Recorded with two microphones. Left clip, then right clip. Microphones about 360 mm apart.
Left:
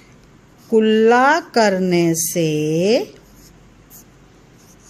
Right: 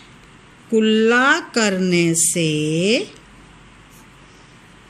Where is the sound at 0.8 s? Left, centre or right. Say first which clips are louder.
Left 2 dB; left.